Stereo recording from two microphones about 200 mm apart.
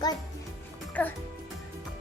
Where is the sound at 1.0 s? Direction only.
5° left (ahead or behind).